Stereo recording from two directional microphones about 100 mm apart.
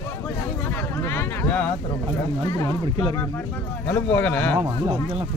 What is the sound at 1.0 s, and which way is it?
Speech, 25° left (ahead or behind).